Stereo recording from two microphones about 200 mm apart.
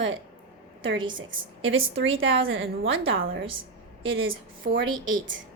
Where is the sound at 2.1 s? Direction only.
75° right (ahead or behind).